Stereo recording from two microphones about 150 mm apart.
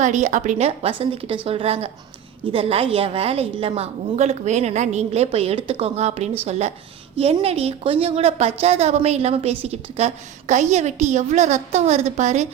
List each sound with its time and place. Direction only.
0.0 s a woman's voice: 55° right (ahead or behind)